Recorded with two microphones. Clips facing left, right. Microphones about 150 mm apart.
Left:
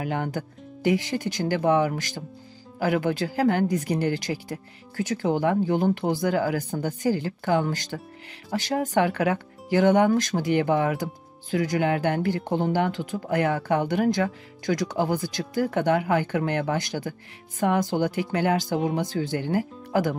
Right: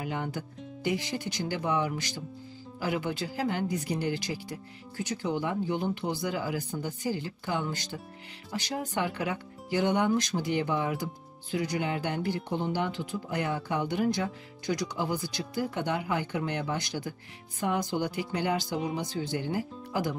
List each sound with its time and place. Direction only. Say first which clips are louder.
0.0 s speech: left 5 dB; 60° left (ahead or behind)
13.9 s speech: left 5 dB; 65° left (ahead or behind)